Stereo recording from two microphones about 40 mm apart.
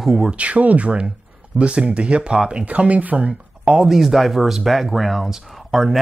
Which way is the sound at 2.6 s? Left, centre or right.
Right.